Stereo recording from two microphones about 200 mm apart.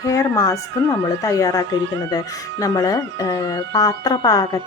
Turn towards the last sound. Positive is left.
turn(degrees=15)  # may be behind; listen again after turning